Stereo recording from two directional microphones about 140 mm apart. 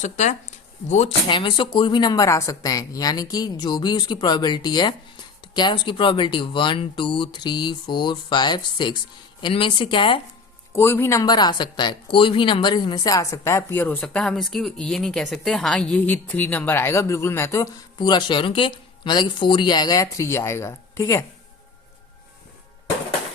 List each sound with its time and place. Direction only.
0.0 s speech: 55° left (ahead or behind)
1.3 s speech: 35° left (ahead or behind)
10.8 s speech: 15° left (ahead or behind)